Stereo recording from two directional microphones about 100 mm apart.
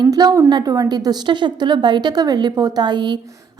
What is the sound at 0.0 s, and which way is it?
A woman's voice, 40° right (ahead or behind).